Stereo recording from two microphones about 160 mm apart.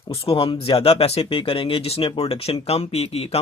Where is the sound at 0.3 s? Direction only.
35° left (ahead or behind).